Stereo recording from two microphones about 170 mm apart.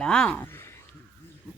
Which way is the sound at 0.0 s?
5° left (ahead or behind).